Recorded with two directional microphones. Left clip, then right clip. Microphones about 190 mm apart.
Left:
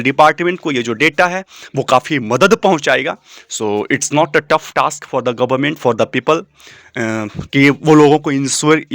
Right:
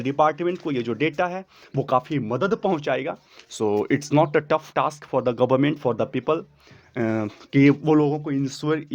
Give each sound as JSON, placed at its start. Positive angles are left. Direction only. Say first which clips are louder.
{"t": 0.0, "sound": "speech", "louder": "left 10 dB", "side_deg": 15}
{"t": 3.5, "sound": "speech", "louder": "left 6 dB", "side_deg": 0}
{"t": 5.8, "sound": "speech", "louder": "left 10 dB", "side_deg": 20}
{"t": 6.9, "sound": "speech", "louder": "left 6 dB", "side_deg": 5}
{"t": 8.0, "sound": "speech", "louder": "left 13 dB", "side_deg": 35}